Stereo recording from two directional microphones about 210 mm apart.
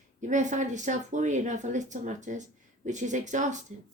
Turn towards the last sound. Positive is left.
turn(degrees=-35)  # may be behind; listen again after turning